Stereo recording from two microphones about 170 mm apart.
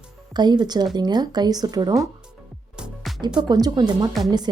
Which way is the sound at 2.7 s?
5° right (ahead or behind).